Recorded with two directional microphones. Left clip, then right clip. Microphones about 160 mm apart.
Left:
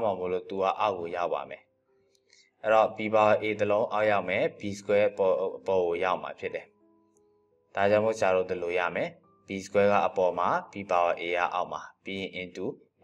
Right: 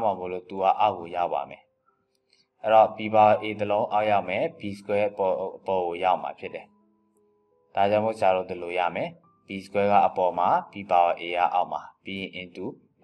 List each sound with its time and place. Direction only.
0.0 s speech: 15° left (ahead or behind)
7.7 s speech: 15° left (ahead or behind)